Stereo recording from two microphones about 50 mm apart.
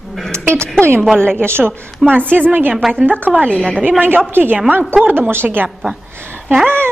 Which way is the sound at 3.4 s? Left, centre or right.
Centre.